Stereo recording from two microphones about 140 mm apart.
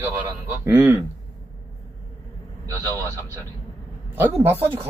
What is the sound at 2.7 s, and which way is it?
Speech, 20° right (ahead or behind).